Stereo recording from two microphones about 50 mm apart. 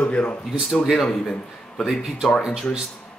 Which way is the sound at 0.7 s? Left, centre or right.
Centre.